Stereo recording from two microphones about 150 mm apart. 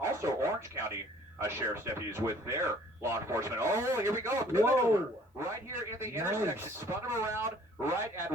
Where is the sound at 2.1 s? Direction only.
20° right (ahead or behind).